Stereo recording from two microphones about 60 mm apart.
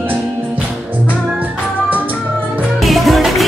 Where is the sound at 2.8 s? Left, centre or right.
Centre.